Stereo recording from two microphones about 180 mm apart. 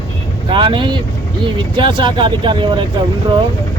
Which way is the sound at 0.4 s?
25° right (ahead or behind).